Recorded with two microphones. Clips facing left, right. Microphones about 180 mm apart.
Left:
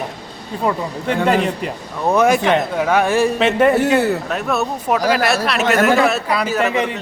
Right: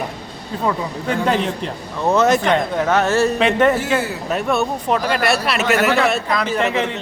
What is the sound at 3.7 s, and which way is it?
Speech, 60° left (ahead or behind).